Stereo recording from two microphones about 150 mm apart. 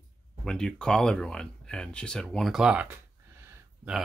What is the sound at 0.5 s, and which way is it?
Speech, 5° left (ahead or behind).